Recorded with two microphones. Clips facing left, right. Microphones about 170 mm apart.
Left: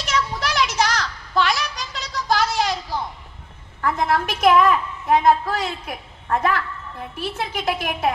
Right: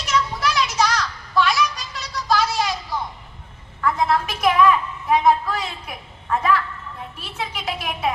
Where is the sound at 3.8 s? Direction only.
50° left (ahead or behind).